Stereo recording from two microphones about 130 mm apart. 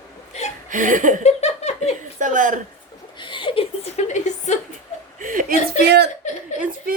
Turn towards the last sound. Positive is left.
turn(degrees=-90)